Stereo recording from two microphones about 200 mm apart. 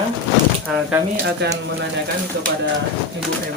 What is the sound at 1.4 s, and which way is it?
Speech, 55° right (ahead or behind).